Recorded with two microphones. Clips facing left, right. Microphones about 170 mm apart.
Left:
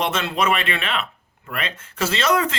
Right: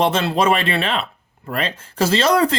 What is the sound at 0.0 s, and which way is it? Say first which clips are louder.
Speech: right 5 dB; 35° right (ahead or behind).